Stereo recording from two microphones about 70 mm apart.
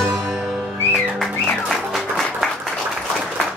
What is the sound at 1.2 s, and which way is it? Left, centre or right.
Music, centre.